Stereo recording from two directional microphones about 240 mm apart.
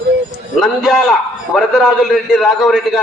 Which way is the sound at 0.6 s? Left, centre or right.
Centre.